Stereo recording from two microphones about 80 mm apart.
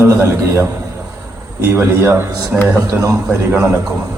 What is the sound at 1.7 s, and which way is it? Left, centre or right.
Speech, right.